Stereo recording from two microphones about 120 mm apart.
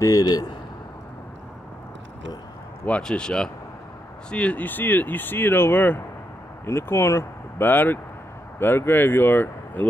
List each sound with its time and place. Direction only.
0.0 s a man's voice: 30° left (ahead or behind)
3.0 s speech: 5° left (ahead or behind)